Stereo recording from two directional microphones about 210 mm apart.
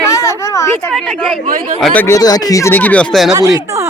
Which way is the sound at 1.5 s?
40° right (ahead or behind).